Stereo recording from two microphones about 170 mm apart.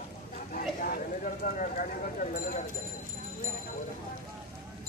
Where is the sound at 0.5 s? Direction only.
55° left (ahead or behind).